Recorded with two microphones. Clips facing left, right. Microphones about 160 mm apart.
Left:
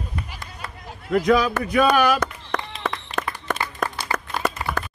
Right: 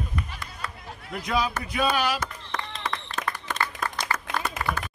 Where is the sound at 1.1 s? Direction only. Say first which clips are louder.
Left 9 dB; 60° left (ahead or behind).